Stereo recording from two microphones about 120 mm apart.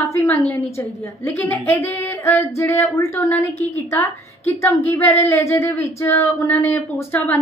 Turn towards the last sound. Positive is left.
turn(degrees=20)  # may be behind; listen again after turning